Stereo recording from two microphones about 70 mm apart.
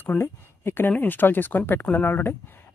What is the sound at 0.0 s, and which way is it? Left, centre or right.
Speech, left.